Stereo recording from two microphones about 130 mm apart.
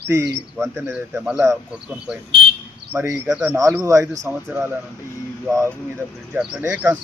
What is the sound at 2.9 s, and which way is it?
Speech, 20° right (ahead or behind).